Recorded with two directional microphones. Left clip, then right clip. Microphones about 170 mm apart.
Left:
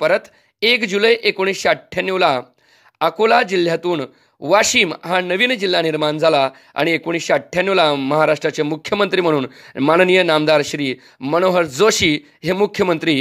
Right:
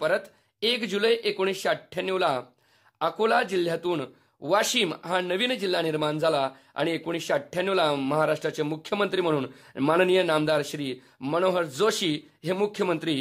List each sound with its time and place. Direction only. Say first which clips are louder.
0.0 s speech: left 9 dB; 30° left (ahead or behind)